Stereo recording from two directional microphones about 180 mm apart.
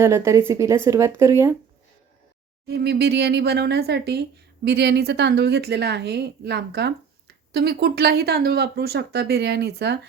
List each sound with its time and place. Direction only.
0.0 s speech: 15° right (ahead or behind)
2.6 s speech: 70° right (ahead or behind)